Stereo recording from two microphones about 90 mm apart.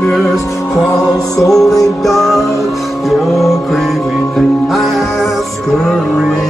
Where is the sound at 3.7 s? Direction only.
Centre (ahead or behind).